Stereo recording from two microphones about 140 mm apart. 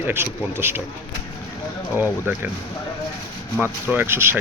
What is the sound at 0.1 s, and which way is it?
Speech, 15° right (ahead or behind).